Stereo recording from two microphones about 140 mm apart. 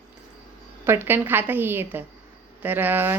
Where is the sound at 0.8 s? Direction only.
15° right (ahead or behind).